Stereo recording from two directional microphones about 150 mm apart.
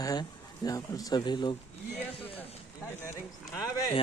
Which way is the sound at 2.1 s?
40° left (ahead or behind).